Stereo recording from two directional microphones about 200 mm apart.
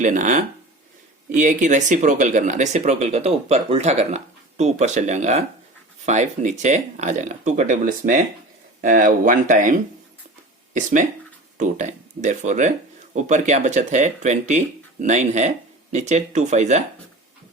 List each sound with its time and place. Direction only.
0.0 s speech: 40° right (ahead or behind)